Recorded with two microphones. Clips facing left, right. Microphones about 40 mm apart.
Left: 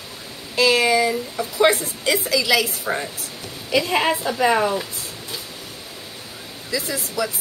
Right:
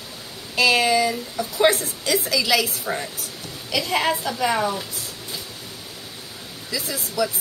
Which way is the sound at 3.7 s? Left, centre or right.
Left.